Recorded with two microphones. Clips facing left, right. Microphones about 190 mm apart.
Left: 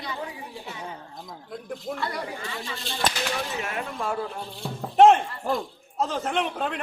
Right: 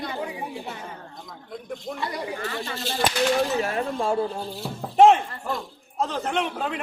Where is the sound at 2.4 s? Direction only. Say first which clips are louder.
Right 4 dB; 55° right (ahead or behind).